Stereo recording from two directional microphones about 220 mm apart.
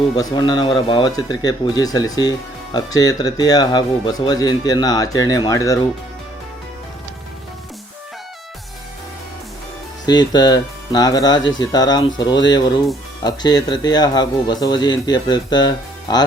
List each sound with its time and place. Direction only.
0.2 s speech: 20° left (ahead or behind)
10.1 s speech: 20° left (ahead or behind)